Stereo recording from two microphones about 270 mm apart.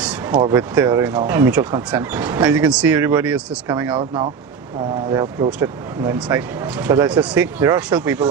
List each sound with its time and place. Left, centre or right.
0.4 s speech: centre
4.0 s speech: centre
5.6 s speech: centre